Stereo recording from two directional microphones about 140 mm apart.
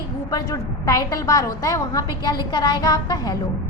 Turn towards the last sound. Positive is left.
turn(degrees=25)  # may be behind; listen again after turning